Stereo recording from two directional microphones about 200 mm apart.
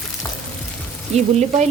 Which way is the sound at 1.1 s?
35° right (ahead or behind).